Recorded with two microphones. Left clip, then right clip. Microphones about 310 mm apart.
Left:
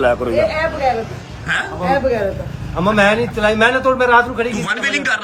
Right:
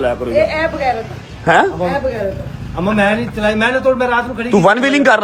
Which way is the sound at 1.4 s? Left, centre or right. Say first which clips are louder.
Right 9 dB; centre.